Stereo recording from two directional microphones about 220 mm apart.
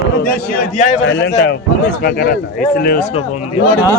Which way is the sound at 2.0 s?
40° left (ahead or behind).